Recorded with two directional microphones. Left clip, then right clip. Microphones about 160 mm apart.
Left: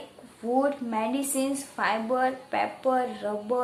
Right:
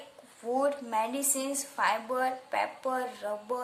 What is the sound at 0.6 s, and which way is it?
A woman's voice, 35° right (ahead or behind).